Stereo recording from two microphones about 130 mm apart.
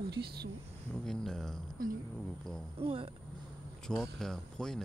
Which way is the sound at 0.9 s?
5° left (ahead or behind).